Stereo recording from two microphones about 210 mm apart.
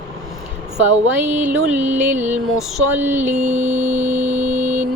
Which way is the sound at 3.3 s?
35° right (ahead or behind).